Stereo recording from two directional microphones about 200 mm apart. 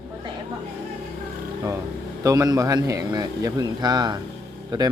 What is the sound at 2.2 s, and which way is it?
A man's voice, 15° right (ahead or behind).